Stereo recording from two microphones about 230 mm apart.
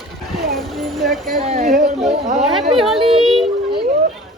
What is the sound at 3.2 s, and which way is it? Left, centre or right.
Child singing, centre.